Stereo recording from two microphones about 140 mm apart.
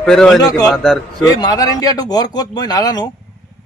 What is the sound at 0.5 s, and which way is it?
A man's voice, 25° left (ahead or behind).